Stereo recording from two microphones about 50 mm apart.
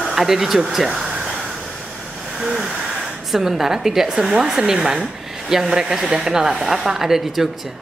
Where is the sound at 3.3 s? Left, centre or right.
Centre.